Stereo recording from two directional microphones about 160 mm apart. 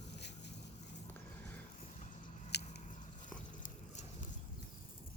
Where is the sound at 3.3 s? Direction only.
55° left (ahead or behind).